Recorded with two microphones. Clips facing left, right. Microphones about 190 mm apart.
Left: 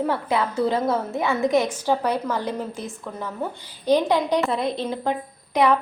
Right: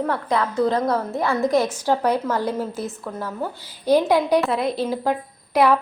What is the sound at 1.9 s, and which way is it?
A woman's voice, 10° right (ahead or behind).